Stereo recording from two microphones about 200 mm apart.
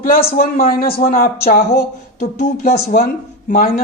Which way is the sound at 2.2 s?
40° left (ahead or behind).